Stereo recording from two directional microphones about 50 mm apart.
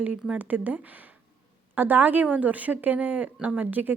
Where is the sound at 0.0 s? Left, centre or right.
Right.